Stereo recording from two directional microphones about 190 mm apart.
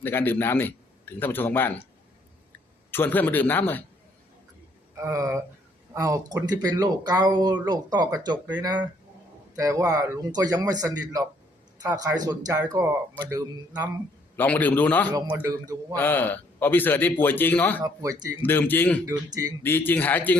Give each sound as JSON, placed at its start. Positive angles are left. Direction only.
{"t": 0.0, "sound": "a man's voice", "side_deg": 10}
{"t": 2.9, "sound": "a man's voice", "side_deg": 10}
{"t": 4.9, "sound": "a man's voice", "side_deg": -15}
{"t": 14.3, "sound": "a man's voice", "side_deg": 10}
{"t": 15.4, "sound": "speech", "side_deg": -20}
{"t": 16.0, "sound": "a man's voice", "side_deg": 10}
{"t": 17.8, "sound": "speech", "side_deg": -20}
{"t": 18.4, "sound": "a man's voice", "side_deg": 10}